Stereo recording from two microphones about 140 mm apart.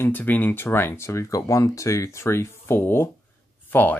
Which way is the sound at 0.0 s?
10° left (ahead or behind).